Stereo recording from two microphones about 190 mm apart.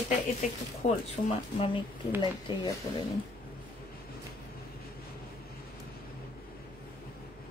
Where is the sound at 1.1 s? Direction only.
30° left (ahead or behind).